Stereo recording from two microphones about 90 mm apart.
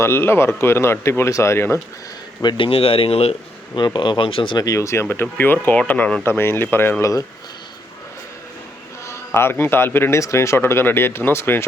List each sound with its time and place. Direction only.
0.0 s speech: 25° left (ahead or behind)
2.4 s speech: 55° left (ahead or behind)
2.6 s speech: 90° left
3.8 s speech: 60° left (ahead or behind)
4.5 s speech: 40° left (ahead or behind)
7.0 s speech: 35° left (ahead or behind)
9.0 s speech: 25° left (ahead or behind)